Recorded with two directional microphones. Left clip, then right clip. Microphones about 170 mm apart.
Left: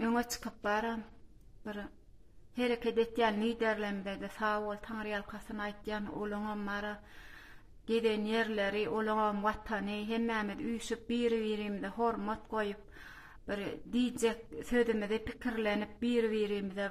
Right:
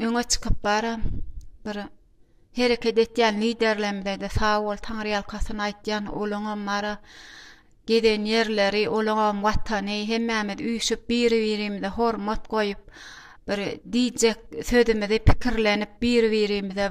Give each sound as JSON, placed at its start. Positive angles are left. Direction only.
{"t": 0.0, "sound": "speech", "side_deg": -30}